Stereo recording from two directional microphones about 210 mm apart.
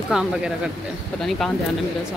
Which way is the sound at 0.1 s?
5° right (ahead or behind).